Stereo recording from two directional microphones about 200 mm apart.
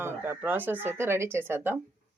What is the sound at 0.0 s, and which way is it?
A woman's voice, 10° right (ahead or behind).